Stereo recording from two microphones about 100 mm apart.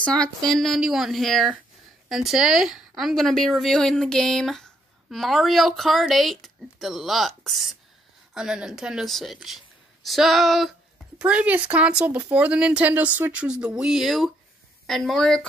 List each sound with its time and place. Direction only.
0.0 s a woman's voice: 10° left (ahead or behind)
11.1 s a woman's voice: 10° right (ahead or behind); by 15.4 s 5° left (ahead or behind)